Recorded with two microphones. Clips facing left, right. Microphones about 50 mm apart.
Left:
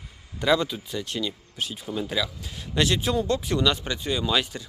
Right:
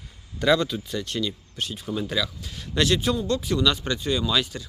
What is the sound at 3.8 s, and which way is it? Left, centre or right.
Speech, centre.